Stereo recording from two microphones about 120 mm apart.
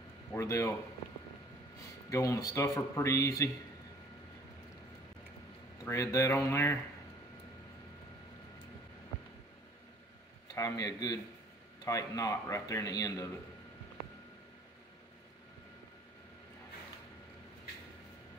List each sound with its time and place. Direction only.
0.3 s a man's voice: 25° left (ahead or behind)
2.0 s a man's voice: 25° left (ahead or behind)
5.9 s a man's voice: 25° left (ahead or behind)
10.5 s a man's voice: 30° left (ahead or behind)